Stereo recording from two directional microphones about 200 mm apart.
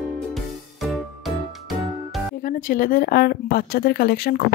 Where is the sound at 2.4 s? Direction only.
45° left (ahead or behind).